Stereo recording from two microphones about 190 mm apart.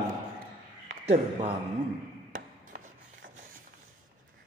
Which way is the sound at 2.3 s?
45° right (ahead or behind).